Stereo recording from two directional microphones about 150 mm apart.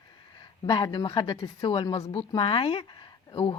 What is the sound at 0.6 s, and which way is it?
Speech, 30° left (ahead or behind).